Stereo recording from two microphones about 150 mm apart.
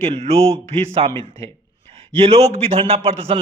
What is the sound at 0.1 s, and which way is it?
A man's voice, 45° right (ahead or behind).